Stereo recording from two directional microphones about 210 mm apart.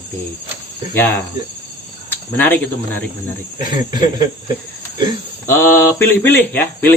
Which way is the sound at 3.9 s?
20° right (ahead or behind).